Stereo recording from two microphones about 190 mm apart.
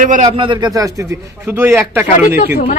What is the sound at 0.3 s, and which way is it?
Speech, 25° right (ahead or behind).